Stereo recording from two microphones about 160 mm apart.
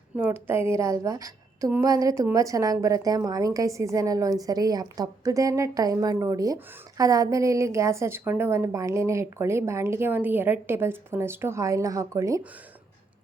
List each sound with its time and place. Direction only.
0.2 s a woman's voice: 10° right (ahead or behind)